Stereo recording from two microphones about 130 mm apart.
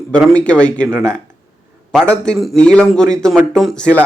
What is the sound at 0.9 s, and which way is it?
Speech, 20° right (ahead or behind).